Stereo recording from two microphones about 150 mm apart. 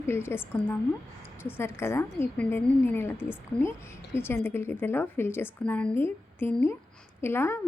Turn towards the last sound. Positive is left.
turn(degrees=15)  # may be behind; listen again after turning